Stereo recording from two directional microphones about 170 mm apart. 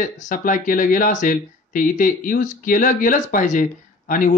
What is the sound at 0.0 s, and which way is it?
Speech, 50° left (ahead or behind).